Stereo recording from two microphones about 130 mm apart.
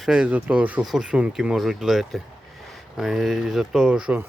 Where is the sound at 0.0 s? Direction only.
5° right (ahead or behind).